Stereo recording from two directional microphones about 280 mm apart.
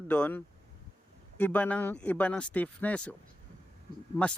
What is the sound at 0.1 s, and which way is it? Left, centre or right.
Speech, centre.